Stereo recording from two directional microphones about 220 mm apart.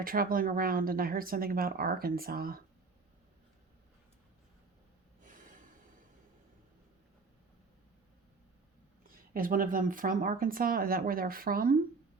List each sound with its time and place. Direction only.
0.0 s speech: 40° right (ahead or behind)
5.2 s snort: 35° right (ahead or behind)
9.0 s speech: 40° right (ahead or behind)